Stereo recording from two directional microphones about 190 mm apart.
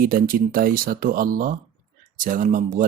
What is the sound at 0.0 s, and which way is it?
Speech, 50° right (ahead or behind).